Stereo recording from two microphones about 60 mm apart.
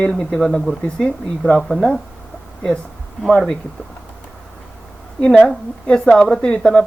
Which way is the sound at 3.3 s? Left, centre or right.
Centre.